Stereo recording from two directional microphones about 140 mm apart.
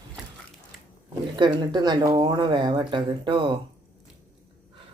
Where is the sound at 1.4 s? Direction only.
30° right (ahead or behind).